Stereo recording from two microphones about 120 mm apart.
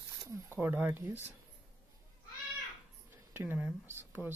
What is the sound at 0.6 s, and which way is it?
Speech, 15° right (ahead or behind).